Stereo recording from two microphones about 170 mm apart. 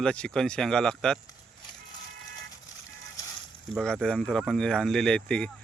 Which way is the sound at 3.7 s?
5° left (ahead or behind).